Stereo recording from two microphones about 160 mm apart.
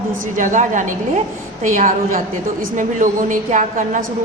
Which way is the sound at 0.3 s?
50° right (ahead or behind).